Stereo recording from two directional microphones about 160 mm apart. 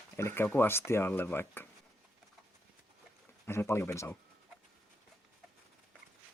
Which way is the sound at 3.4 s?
15° left (ahead or behind).